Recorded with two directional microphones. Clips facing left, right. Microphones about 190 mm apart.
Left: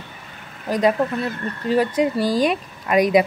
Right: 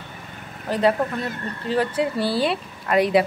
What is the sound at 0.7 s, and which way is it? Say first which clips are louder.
A woman's voice: left 2 dB; 15° left (ahead or behind).